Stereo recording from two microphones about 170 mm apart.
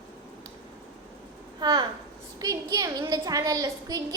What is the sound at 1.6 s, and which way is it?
A child's voice, 25° right (ahead or behind).